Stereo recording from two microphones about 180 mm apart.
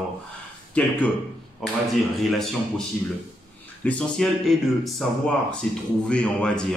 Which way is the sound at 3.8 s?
5° left (ahead or behind).